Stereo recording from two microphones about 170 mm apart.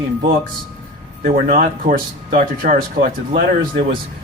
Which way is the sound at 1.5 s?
55° right (ahead or behind).